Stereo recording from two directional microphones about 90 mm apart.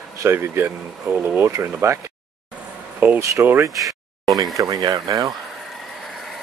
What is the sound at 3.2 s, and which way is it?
Speech, 35° right (ahead or behind).